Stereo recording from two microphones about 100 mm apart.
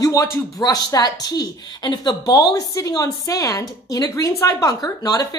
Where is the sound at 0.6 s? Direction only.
40° left (ahead or behind).